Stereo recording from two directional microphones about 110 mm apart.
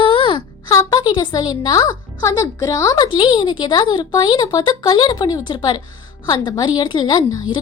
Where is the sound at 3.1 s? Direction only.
50° left (ahead or behind).